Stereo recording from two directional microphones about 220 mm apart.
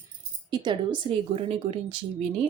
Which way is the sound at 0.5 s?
20° right (ahead or behind).